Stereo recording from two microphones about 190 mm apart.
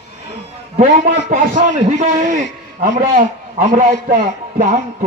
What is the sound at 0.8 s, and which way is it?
A man's voice, 45° right (ahead or behind).